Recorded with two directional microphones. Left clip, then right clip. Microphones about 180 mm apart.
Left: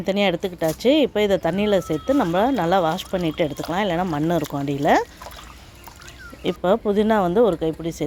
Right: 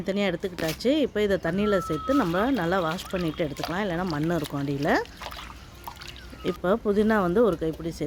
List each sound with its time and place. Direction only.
0.0 s speech: 15° left (ahead or behind)
6.4 s speech: 10° left (ahead or behind)